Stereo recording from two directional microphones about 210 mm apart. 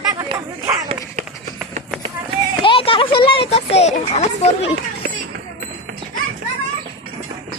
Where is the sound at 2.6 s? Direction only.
25° left (ahead or behind).